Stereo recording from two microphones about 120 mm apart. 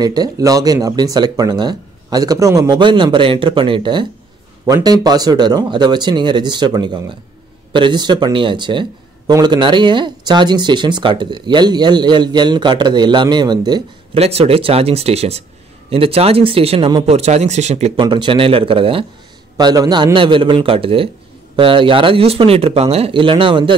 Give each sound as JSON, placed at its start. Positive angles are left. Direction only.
{"t": 0.0, "sound": "speech", "side_deg": -35}
{"t": 14.1, "sound": "speech", "side_deg": -55}
{"t": 17.9, "sound": "speech", "side_deg": -40}
{"t": 19.5, "sound": "speech", "side_deg": -35}